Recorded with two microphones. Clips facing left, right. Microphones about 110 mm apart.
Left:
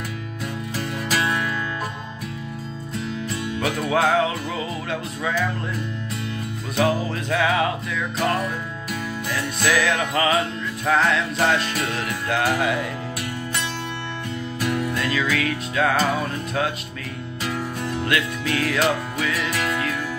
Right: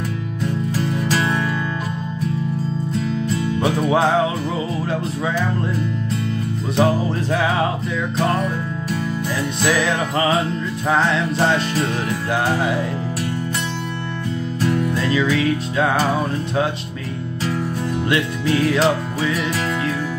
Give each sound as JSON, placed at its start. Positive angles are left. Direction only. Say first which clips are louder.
{"t": 1.1, "sound": "music", "louder": "right 1 dB", "side_deg": 5}
{"t": 3.6, "sound": "music", "louder": "right 3 dB", "side_deg": -25}
{"t": 6.8, "sound": "music", "louder": "right 3 dB", "side_deg": -30}
{"t": 9.6, "sound": "music", "louder": "right 1 dB", "side_deg": -20}
{"t": 14.9, "sound": "music", "louder": "right 4 dB", "side_deg": -20}
{"t": 18.0, "sound": "music", "louder": "right 4 dB", "side_deg": -25}